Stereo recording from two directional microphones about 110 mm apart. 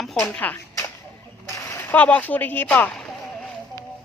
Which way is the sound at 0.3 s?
15° left (ahead or behind).